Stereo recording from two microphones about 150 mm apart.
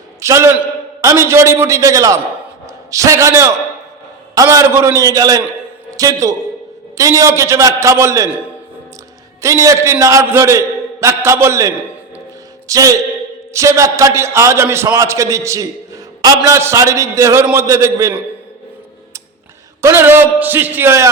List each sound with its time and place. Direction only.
0.2 s a man's voice: 20° right (ahead or behind)
9.4 s a man's voice: 20° right (ahead or behind)
12.6 s music: 25° right (ahead or behind)
13.5 s a man's voice: 20° right (ahead or behind)
19.8 s a man's voice: 15° right (ahead or behind)